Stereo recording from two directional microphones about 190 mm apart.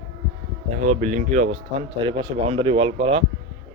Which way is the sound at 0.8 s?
35° right (ahead or behind).